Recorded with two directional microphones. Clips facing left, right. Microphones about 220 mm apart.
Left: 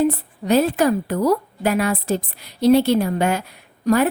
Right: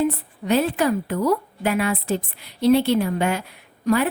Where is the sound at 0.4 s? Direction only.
40° left (ahead or behind).